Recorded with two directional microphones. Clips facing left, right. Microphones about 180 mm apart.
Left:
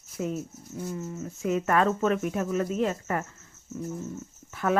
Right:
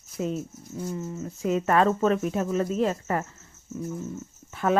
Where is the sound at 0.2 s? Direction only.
25° right (ahead or behind).